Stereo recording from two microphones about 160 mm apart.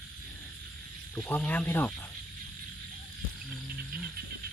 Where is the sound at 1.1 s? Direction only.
10° left (ahead or behind).